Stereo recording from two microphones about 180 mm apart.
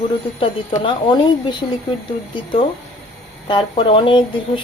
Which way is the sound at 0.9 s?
25° left (ahead or behind).